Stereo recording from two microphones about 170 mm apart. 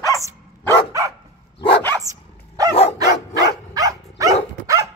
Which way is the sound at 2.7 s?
35° left (ahead or behind).